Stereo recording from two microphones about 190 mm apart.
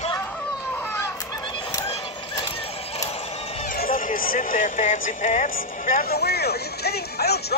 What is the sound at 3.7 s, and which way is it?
Speech, 50° left (ahead or behind).